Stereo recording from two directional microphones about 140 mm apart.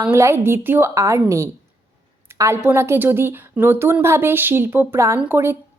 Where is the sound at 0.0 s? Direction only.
20° right (ahead or behind).